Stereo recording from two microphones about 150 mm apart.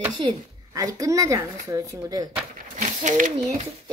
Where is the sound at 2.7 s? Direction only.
55° right (ahead or behind).